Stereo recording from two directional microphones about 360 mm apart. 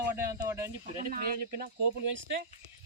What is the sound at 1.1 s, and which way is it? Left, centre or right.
Speech, right.